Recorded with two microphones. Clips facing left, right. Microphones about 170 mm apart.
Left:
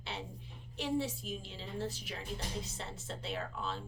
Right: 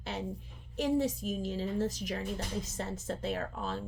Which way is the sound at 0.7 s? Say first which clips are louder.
Right 6 dB; 45° right (ahead or behind).